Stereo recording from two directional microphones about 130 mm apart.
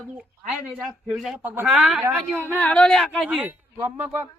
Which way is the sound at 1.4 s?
15° right (ahead or behind).